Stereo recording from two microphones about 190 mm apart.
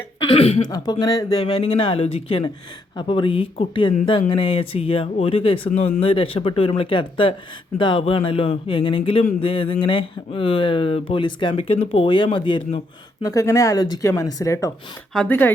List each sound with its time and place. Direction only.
0.3 s cough: 30° left (ahead or behind)
0.7 s speech: 20° left (ahead or behind)
1.4 s speech: 30° left (ahead or behind)
13.2 s speech: 15° left (ahead or behind)